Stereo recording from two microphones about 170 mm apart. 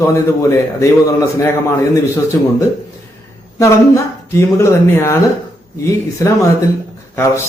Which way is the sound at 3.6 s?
20° left (ahead or behind).